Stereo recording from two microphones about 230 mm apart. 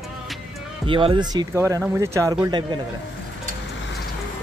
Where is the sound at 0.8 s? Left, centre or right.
Right.